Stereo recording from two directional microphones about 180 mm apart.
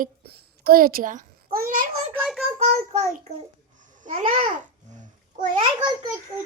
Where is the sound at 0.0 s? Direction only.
55° right (ahead or behind).